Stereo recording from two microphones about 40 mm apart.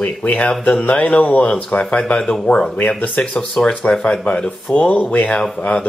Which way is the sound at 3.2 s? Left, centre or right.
Left.